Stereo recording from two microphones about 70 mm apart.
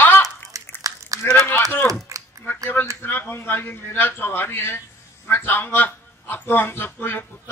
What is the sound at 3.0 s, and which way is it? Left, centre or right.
A man's voice, left.